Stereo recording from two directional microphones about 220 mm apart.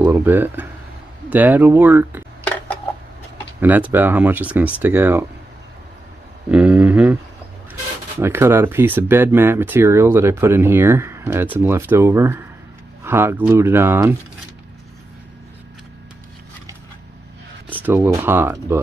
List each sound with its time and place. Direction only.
0.0 s speech: 10° right (ahead or behind)
3.6 s speech: 10° right (ahead or behind)
6.5 s speech: 5° right (ahead or behind)
8.2 s speech: 10° right (ahead or behind)
17.8 s speech: 10° right (ahead or behind)